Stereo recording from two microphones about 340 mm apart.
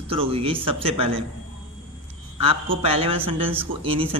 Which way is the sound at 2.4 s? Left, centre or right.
Centre.